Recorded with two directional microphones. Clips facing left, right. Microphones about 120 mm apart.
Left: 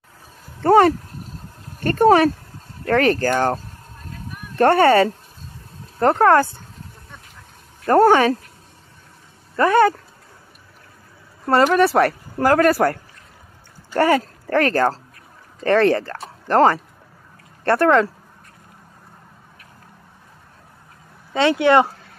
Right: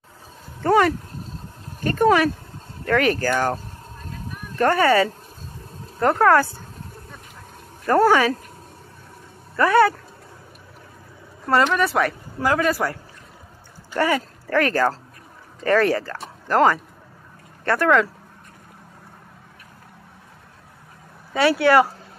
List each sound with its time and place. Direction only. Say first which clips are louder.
0.6 s speech: left 4 dB; 35° left (ahead or behind)
4.6 s speech: left 4 dB; 30° left (ahead or behind)
7.9 s speech: left 3 dB; 30° left (ahead or behind)
9.6 s speech: left 1 dB; 25° left (ahead or behind)
11.4 s speech: left 4 dB; 35° left (ahead or behind)
13.9 s speech: left 4 dB; 40° left (ahead or behind)
21.3 s speech: left 1 dB; 20° left (ahead or behind)